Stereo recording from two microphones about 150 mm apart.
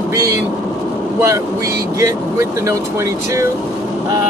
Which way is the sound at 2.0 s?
20° right (ahead or behind).